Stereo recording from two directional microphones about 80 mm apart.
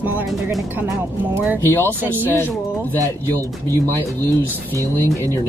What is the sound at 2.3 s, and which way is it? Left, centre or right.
Speech, left.